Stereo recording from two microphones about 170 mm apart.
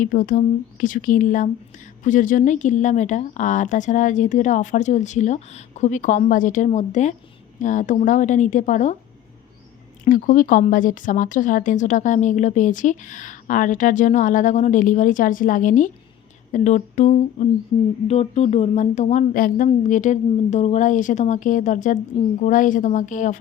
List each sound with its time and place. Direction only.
0.0 s speech: 50° left (ahead or behind)
10.0 s speech: 50° left (ahead or behind)